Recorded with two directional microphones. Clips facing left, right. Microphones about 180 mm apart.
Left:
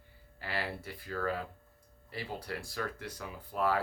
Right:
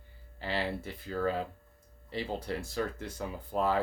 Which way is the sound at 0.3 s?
25° right (ahead or behind).